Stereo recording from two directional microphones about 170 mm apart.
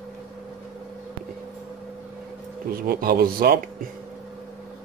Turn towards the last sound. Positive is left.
turn(degrees=-65)  # may be behind; listen again after turning